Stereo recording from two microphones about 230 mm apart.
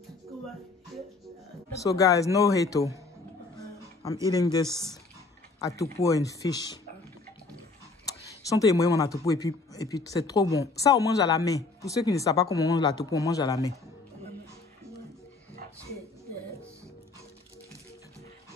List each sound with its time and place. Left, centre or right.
1.7 s speech: centre
4.3 s speech: centre
8.5 s speech: centre